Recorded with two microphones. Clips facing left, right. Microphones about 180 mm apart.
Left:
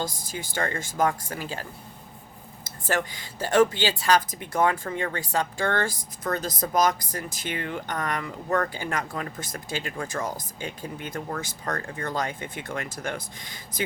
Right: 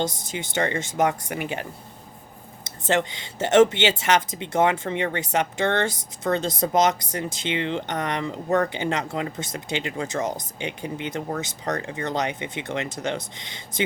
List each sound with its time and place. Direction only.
0.0 s speech: 25° right (ahead or behind)
2.6 s speech: 25° right (ahead or behind)